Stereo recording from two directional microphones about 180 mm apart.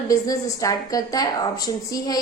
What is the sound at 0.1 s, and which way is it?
A woman's voice, 20° left (ahead or behind).